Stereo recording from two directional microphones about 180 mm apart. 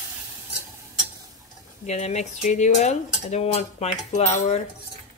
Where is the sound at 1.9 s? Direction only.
40° left (ahead or behind).